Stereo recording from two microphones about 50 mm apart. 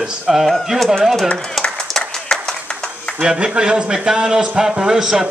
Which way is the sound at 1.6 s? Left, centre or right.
Centre.